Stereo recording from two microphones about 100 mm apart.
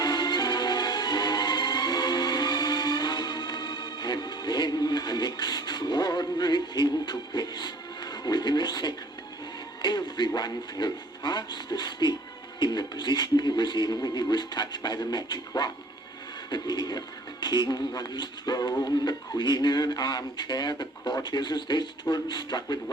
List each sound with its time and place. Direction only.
0.0 s music: 45° left (ahead or behind)
9.8 s speech: 45° left (ahead or behind)